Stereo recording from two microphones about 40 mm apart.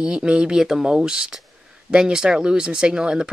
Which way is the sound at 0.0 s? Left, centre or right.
Right.